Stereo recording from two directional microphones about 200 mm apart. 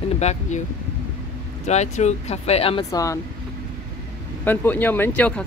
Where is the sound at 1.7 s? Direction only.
35° left (ahead or behind).